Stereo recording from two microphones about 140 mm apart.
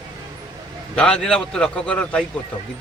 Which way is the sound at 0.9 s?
5° left (ahead or behind).